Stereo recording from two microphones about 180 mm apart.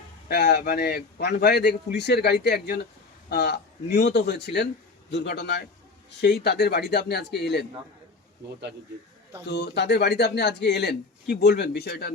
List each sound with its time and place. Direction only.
0.3 s a man's voice: 65° left (ahead or behind)
9.5 s a man's voice: 70° left (ahead or behind)